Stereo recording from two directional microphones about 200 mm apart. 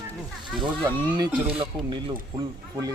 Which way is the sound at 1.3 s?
25° right (ahead or behind).